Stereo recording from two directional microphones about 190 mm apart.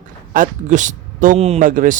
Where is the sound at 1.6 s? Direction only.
45° right (ahead or behind).